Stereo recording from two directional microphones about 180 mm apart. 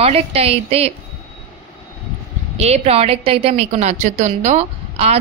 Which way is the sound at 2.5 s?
35° right (ahead or behind).